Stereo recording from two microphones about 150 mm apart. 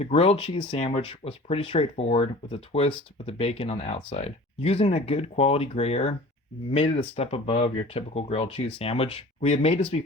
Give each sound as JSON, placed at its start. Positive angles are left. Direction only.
{"t": 0.0, "sound": "speech", "side_deg": 40}